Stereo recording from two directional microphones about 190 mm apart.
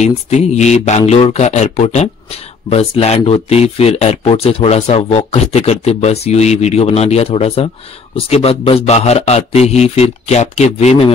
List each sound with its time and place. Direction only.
0.0 s speech: 35° left (ahead or behind)